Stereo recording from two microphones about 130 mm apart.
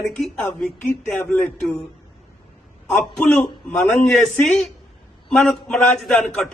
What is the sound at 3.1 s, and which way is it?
Speech, 10° left (ahead or behind).